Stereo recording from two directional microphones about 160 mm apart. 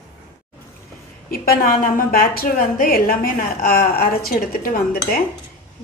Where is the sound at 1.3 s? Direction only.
70° left (ahead or behind).